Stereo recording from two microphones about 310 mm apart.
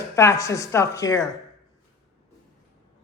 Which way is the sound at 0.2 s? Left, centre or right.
Centre.